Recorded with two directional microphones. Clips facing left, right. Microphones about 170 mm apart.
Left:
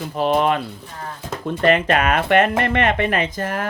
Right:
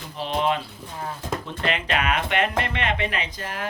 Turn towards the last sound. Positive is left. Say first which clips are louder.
# left 7 dB
turn(degrees=50)  # may be behind; listen again after turning